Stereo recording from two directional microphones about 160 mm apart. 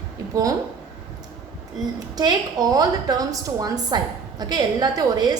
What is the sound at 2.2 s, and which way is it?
A woman's voice, 25° right (ahead or behind).